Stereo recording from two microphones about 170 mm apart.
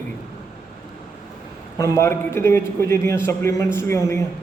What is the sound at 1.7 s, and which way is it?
A man's voice, 15° left (ahead or behind).